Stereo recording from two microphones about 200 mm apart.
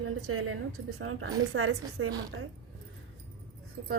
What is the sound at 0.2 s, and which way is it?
A woman's voice, 90° right.